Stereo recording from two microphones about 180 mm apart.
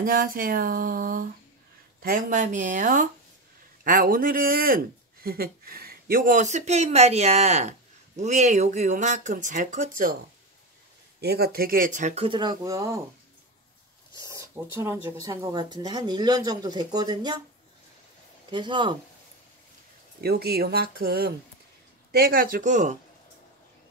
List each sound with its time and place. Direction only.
0.0 s speech: 50° right (ahead or behind)
11.1 s speech: 60° right (ahead or behind); by 13.0 s 20° right (ahead or behind)
14.2 s speech: 20° right (ahead or behind)
18.5 s speech: 25° right (ahead or behind)
20.2 s speech: 60° right (ahead or behind); by 22.9 s 45° right (ahead or behind)